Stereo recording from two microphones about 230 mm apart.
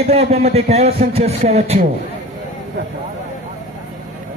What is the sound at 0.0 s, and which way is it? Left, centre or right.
Speech, right.